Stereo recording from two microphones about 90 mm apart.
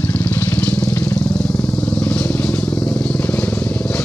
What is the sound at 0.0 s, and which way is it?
Vehicle, 20° left (ahead or behind).